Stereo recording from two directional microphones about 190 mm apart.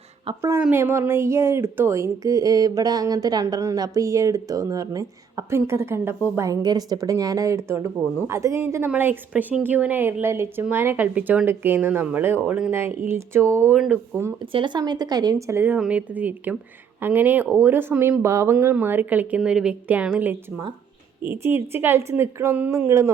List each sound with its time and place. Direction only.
0.3 s speech: 20° right (ahead or behind)
14.5 s speech: 25° right (ahead or behind)